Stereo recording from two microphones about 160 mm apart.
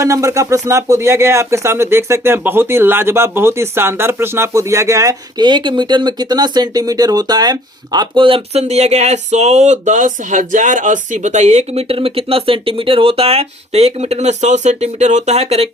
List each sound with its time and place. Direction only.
0.0 s speech: 20° right (ahead or behind); by 15.7 s 40° right (ahead or behind)